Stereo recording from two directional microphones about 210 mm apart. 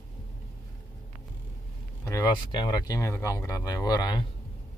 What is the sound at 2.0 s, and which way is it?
Speech, 15° left (ahead or behind).